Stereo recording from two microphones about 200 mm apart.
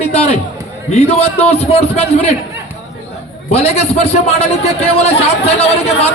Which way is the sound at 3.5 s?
30° left (ahead or behind).